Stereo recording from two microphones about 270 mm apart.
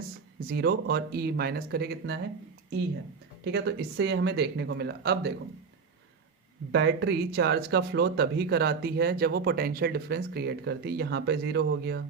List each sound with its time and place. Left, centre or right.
0.3 s speech: right
3.4 s speech: right
6.7 s speech: right